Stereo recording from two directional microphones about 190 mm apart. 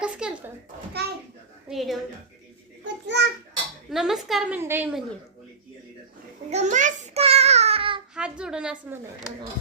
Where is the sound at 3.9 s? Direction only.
Centre (ahead or behind).